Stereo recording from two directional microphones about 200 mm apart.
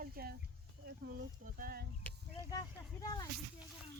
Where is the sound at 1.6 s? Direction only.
50° right (ahead or behind).